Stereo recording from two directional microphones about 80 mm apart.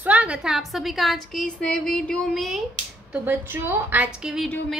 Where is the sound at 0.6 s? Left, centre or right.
Centre.